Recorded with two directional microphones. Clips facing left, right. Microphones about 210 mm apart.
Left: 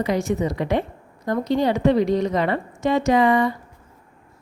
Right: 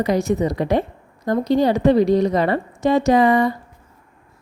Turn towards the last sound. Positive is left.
turn(degrees=-40)  # may be behind; listen again after turning